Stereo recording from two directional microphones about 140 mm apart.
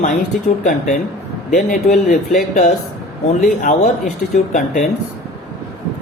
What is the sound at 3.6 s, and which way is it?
Speech, 60° left (ahead or behind).